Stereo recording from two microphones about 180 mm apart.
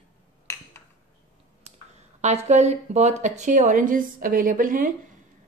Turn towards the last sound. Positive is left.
turn(degrees=-50)  # may be behind; listen again after turning